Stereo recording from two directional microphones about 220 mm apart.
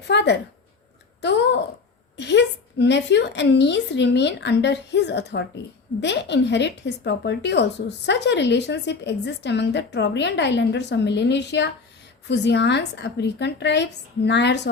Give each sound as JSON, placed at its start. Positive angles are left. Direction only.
{"t": 0.1, "sound": "a woman's voice", "side_deg": 50}